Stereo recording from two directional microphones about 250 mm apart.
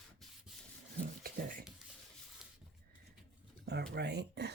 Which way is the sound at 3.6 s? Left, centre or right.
Right.